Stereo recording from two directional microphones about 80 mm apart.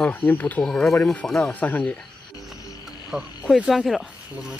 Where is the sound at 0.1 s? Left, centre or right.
Left.